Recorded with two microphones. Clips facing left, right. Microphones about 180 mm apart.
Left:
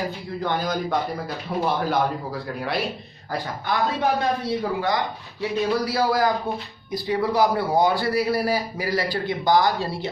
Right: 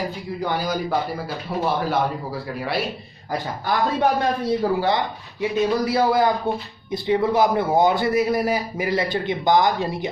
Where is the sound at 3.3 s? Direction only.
20° right (ahead or behind).